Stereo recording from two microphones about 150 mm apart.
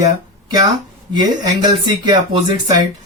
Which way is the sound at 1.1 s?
30° right (ahead or behind).